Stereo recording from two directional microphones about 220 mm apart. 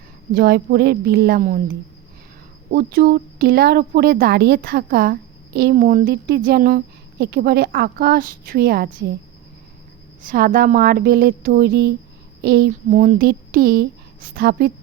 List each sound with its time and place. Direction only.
0.3 s speech: 45° right (ahead or behind)
2.7 s speech: 40° right (ahead or behind)
10.2 s a woman's voice: 40° right (ahead or behind)
12.9 s a woman's voice: 35° right (ahead or behind)